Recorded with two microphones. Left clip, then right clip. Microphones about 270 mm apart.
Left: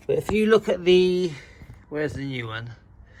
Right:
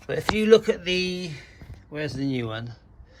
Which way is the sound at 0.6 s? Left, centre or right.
Centre.